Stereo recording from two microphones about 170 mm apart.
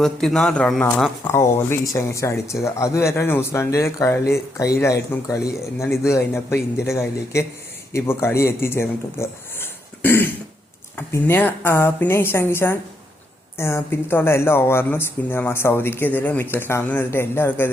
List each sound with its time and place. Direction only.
0.0 s speech: centre (ahead or behind)